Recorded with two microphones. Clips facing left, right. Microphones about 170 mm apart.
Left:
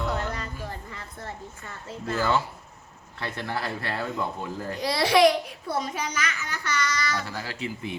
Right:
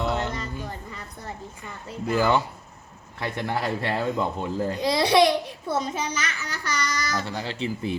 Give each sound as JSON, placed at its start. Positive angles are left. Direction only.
{"t": 0.0, "sound": "music", "side_deg": -20}
{"t": 3.2, "sound": "speech", "side_deg": -15}
{"t": 6.4, "sound": "child singing", "side_deg": -35}
{"t": 7.3, "sound": "speech", "side_deg": -25}